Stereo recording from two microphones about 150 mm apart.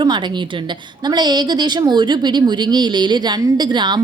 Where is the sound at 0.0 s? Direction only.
30° right (ahead or behind).